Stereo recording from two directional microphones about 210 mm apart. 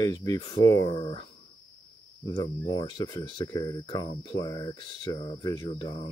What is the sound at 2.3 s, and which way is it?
Speech, 20° left (ahead or behind).